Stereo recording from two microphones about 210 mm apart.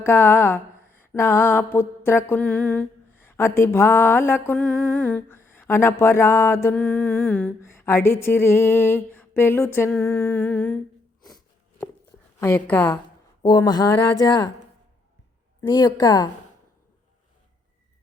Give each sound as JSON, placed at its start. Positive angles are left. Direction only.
{"t": 0.0, "sound": "a sound", "side_deg": 10}
{"t": 3.2, "sound": "mantra", "side_deg": 10}
{"t": 12.4, "sound": "mantra", "side_deg": 10}
{"t": 13.4, "sound": "speech", "side_deg": 20}
{"t": 15.7, "sound": "speech", "side_deg": 20}